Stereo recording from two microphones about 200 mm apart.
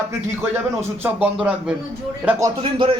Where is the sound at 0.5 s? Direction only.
10° right (ahead or behind).